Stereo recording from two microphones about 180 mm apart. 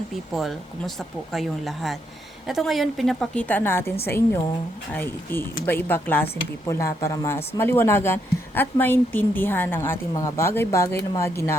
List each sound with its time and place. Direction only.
0.3 s speech: centre (ahead or behind)
4.9 s speech: 10° left (ahead or behind)